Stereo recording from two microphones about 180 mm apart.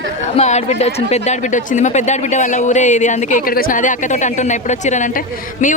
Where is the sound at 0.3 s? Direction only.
40° left (ahead or behind).